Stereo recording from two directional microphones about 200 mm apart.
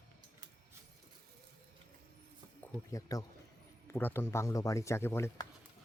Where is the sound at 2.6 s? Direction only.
15° left (ahead or behind).